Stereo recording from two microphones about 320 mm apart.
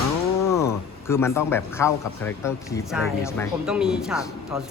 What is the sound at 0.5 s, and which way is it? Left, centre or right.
Speech, centre.